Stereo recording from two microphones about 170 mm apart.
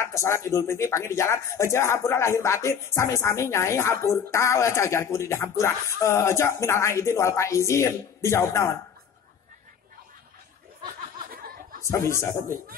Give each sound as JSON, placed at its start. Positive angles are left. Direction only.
{"t": 0.0, "sound": "speech", "side_deg": 15}
{"t": 11.8, "sound": "speech", "side_deg": 15}